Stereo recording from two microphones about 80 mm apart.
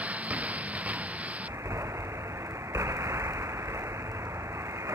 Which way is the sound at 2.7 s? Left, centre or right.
Right.